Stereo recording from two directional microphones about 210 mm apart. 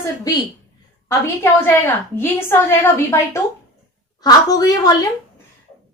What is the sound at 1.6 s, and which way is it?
A woman's voice, 10° left (ahead or behind).